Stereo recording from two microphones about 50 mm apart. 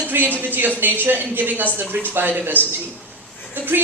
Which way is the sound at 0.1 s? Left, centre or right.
Right.